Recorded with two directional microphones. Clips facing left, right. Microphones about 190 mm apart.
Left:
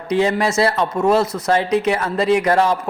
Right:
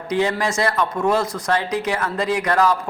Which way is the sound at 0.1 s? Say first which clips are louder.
Left 3 dB; 25° left (ahead or behind).